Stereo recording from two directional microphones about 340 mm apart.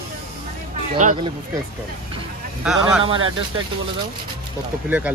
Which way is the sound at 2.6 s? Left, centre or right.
Centre.